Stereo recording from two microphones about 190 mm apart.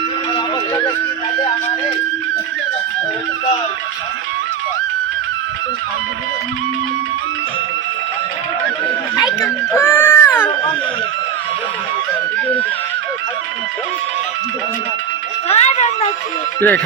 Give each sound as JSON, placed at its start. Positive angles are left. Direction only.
{"t": 9.1, "sound": "cat", "side_deg": 15}
{"t": 15.4, "sound": "a sound", "side_deg": 35}
{"t": 16.6, "sound": "music", "side_deg": 10}